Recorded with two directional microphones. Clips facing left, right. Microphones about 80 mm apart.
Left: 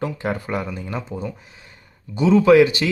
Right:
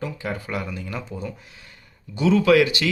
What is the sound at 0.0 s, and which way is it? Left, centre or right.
Speech, left.